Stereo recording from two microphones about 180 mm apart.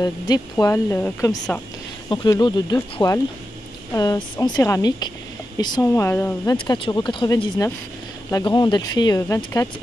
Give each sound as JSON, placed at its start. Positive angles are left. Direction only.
{"t": 0.0, "sound": "speech", "side_deg": 20}
{"t": 6.5, "sound": "speech", "side_deg": 30}